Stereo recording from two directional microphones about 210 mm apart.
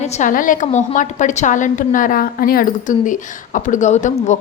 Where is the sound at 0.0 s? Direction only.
35° left (ahead or behind).